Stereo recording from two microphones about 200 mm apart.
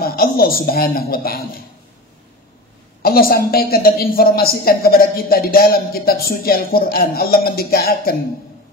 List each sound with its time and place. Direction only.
0.0 s a woman's voice: 50° left (ahead or behind)
3.0 s speech: 50° left (ahead or behind)